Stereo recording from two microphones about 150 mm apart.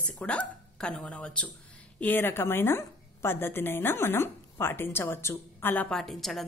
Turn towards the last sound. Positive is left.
turn(degrees=0)  # may be behind; listen again after turning